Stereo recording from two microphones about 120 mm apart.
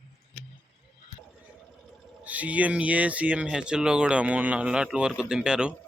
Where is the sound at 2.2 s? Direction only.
10° right (ahead or behind).